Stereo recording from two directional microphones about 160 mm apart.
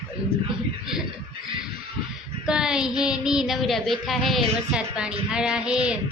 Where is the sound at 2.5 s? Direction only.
5° right (ahead or behind).